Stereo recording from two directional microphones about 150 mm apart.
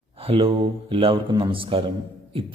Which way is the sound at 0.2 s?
40° right (ahead or behind).